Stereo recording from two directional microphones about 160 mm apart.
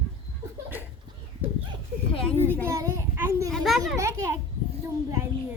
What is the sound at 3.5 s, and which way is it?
Speech, centre (ahead or behind).